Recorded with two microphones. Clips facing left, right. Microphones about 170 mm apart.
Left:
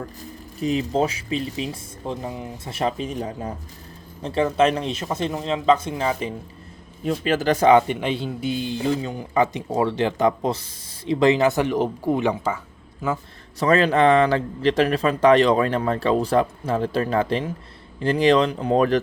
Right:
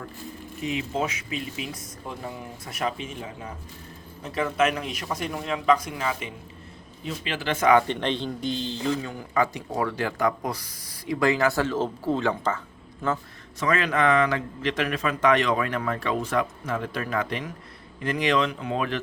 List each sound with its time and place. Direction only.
0.6 s speech: 35° left (ahead or behind)
4.2 s a man's voice: 30° left (ahead or behind)
7.0 s speech: 45° left (ahead or behind)
7.9 s a man's voice: 5° left (ahead or behind)
13.6 s speech: 35° left (ahead or behind)